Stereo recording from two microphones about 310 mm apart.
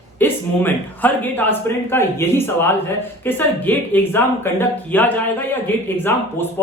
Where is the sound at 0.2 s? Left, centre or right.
Centre.